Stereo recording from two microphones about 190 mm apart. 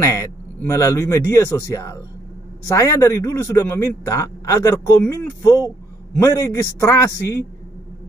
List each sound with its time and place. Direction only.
0.0 s a man's voice: 15° left (ahead or behind)